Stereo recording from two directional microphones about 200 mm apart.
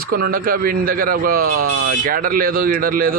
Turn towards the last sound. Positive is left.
turn(degrees=-45)  # may be behind; listen again after turning